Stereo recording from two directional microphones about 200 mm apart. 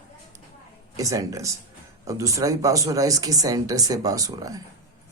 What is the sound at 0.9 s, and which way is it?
Speech, 15° right (ahead or behind).